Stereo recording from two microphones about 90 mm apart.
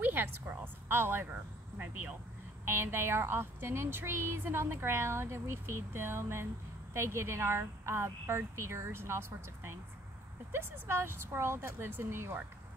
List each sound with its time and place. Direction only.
0.0 s a woman's voice: 20° right (ahead or behind)